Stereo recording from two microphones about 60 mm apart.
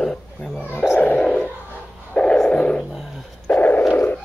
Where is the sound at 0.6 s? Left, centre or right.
Left.